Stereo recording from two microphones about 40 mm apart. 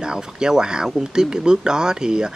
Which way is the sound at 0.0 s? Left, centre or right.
Centre.